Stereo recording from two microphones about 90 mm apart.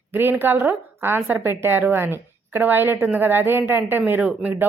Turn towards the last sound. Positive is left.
turn(degrees=-15)  # may be behind; listen again after turning